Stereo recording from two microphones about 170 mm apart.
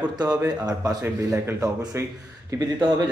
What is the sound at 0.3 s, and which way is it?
A man's voice, 20° right (ahead or behind).